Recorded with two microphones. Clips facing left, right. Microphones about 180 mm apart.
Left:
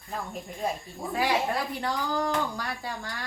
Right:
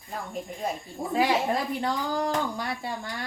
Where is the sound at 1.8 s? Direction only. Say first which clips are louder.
Right 1 dB; 20° right (ahead or behind).